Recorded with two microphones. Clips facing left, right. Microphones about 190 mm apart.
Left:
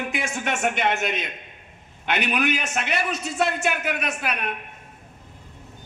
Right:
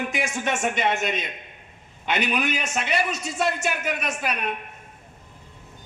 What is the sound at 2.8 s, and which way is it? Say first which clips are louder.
A man's voice: right 1 dB; 60° left (ahead or behind).